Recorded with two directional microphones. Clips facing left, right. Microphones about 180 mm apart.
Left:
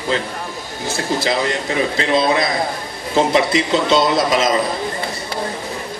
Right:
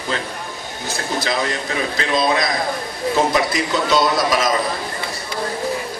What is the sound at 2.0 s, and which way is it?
A man's voice, 25° left (ahead or behind).